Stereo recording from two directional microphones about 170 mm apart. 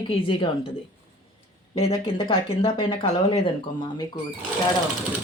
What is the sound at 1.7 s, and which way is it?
Speech, 35° left (ahead or behind).